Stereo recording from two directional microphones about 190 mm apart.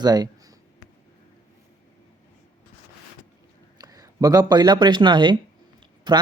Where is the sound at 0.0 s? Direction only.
20° right (ahead or behind).